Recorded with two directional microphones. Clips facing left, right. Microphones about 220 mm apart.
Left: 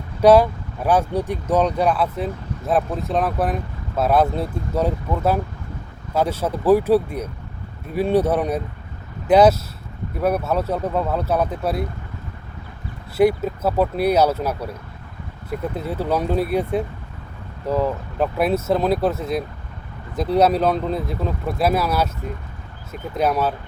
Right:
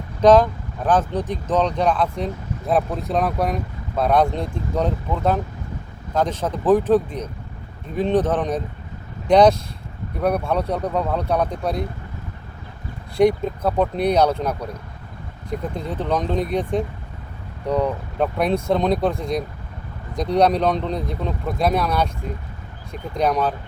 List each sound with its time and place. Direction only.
0.2 s speech: 10° left (ahead or behind)
13.1 s speech: 5° left (ahead or behind)